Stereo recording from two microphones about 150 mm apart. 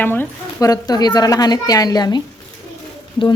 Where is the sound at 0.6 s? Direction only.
25° left (ahead or behind).